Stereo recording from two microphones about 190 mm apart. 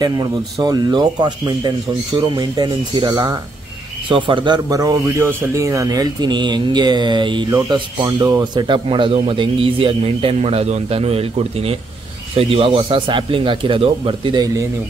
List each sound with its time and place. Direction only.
0.0 s speech: 20° right (ahead or behind)